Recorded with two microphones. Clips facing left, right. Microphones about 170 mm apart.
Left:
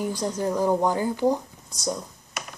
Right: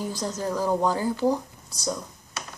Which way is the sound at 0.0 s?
15° left (ahead or behind).